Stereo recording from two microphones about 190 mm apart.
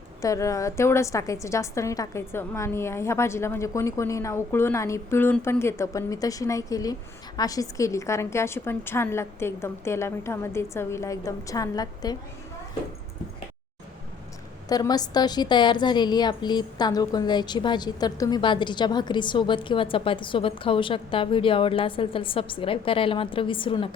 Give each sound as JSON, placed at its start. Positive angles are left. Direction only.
{"t": 0.2, "sound": "a woman's voice", "side_deg": 15}
{"t": 14.7, "sound": "a woman's voice", "side_deg": 20}